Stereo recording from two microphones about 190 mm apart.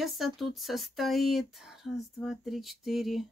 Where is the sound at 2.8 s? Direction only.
Centre (ahead or behind).